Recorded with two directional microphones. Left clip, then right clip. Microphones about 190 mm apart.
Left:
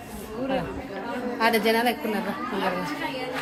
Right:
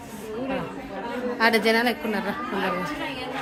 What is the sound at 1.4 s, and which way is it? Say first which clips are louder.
Speech: right 1 dB; 10° right (ahead or behind).